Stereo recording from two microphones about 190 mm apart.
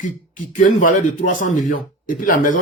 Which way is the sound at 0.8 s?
45° left (ahead or behind).